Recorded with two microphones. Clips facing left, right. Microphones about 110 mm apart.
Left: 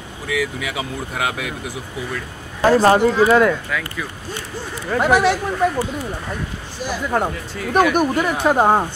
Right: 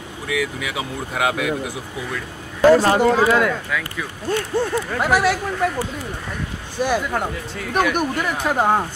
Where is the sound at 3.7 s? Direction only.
Centre (ahead or behind).